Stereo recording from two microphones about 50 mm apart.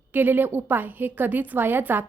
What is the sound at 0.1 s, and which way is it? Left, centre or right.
A woman's voice, right.